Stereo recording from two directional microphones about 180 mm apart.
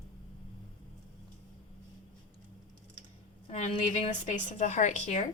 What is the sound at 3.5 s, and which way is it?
A woman's voice, 40° left (ahead or behind).